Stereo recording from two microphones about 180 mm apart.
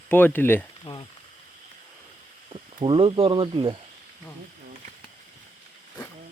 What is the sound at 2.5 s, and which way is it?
Speech, 30° right (ahead or behind).